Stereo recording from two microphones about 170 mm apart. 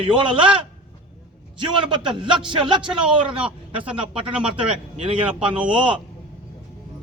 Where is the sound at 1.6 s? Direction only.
30° right (ahead or behind).